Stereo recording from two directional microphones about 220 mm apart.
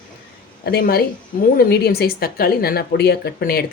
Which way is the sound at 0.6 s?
45° left (ahead or behind).